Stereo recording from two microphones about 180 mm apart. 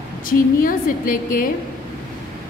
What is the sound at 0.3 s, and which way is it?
A woman's voice, 50° left (ahead or behind).